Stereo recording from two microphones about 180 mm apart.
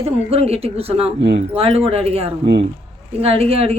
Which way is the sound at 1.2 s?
75° right (ahead or behind).